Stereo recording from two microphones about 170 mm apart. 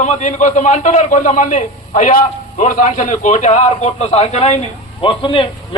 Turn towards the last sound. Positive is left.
turn(degrees=30)  # may be behind; listen again after turning